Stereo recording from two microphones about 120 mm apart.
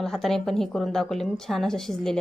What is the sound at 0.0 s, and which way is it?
A woman's voice, 5° left (ahead or behind).